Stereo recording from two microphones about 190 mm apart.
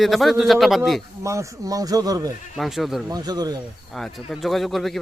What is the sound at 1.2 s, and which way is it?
Speech, 15° right (ahead or behind).